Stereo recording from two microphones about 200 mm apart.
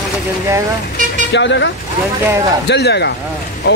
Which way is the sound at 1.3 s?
60° left (ahead or behind).